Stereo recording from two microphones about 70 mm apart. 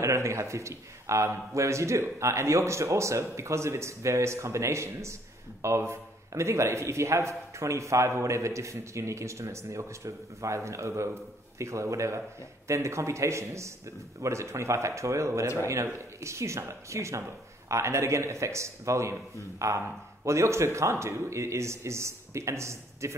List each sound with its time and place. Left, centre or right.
0.0 s a man's voice: right